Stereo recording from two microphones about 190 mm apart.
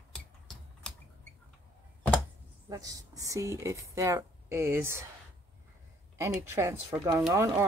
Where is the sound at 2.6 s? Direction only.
20° right (ahead or behind).